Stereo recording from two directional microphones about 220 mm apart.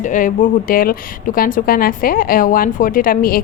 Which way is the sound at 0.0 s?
35° left (ahead or behind).